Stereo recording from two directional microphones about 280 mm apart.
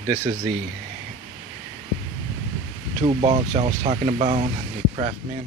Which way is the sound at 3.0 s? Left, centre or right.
Right.